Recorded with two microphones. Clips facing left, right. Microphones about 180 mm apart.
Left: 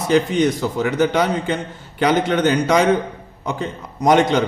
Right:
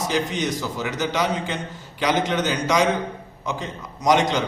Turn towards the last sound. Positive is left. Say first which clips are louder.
# left 4 dB
turn(degrees=55)  # may be behind; listen again after turning